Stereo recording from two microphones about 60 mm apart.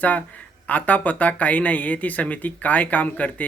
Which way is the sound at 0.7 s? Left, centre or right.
Left.